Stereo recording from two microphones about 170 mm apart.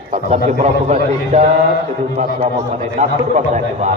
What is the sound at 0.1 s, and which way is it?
A man's voice, 40° right (ahead or behind).